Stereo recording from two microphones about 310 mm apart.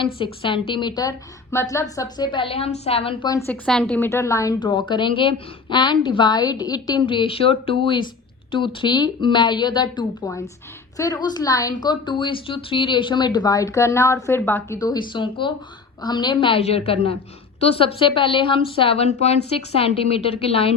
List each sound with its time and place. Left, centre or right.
0.0 s a woman's voice: centre